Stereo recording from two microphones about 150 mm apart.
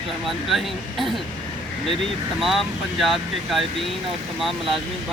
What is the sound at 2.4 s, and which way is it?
Speech, centre (ahead or behind).